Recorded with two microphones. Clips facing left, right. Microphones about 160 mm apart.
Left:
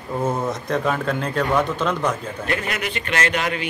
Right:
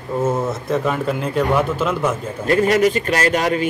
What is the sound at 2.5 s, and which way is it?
A man's voice, 35° right (ahead or behind).